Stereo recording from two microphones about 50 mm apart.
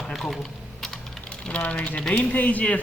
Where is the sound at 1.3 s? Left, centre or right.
Left.